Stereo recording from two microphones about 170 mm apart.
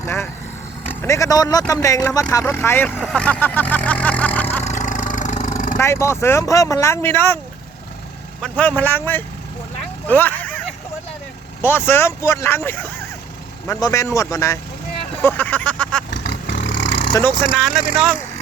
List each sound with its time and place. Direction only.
0.0 s vehicle: 15° left (ahead or behind)
1.0 s speech: 20° left (ahead or behind)
3.0 s vehicle: 5° left (ahead or behind)
4.6 s vehicle: 45° left (ahead or behind)
5.7 s speech: 15° left (ahead or behind)
8.4 s speech: 10° left (ahead or behind)
11.6 s speech: 15° left (ahead or behind)
15.2 s a sound: 10° left (ahead or behind)
16.0 s vehicle: 90° left
17.2 s speech: centre (ahead or behind)